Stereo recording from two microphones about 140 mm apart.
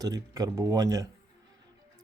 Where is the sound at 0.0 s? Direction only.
25° right (ahead or behind).